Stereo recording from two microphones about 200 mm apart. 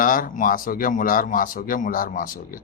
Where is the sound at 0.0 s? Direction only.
45° left (ahead or behind).